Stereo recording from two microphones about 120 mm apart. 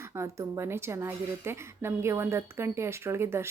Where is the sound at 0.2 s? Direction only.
25° right (ahead or behind).